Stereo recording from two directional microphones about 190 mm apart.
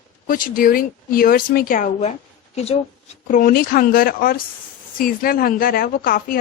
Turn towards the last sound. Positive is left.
turn(degrees=50)  # may be behind; listen again after turning